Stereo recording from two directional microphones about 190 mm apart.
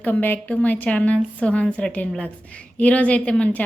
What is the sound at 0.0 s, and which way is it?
A woman's voice, 10° left (ahead or behind).